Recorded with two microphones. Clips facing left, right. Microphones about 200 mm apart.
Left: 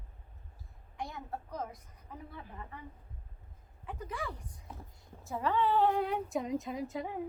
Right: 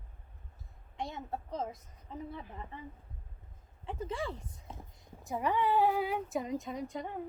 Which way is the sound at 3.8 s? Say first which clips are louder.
Right 3 dB; 25° right (ahead or behind).